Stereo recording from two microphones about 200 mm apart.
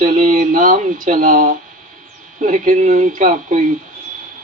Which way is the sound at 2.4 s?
35° right (ahead or behind).